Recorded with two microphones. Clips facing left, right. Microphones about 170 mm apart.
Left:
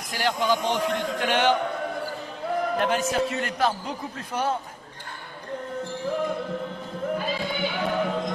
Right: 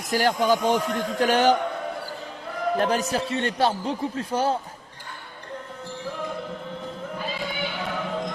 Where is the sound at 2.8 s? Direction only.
35° right (ahead or behind).